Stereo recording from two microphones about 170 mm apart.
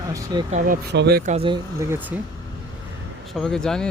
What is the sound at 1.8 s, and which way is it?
Speech, 10° right (ahead or behind).